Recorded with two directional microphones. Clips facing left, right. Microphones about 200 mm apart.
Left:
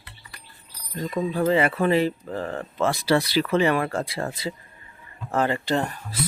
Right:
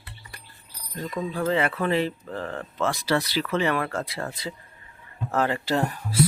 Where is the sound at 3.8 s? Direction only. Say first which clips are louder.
Left 3 dB; 30° left (ahead or behind).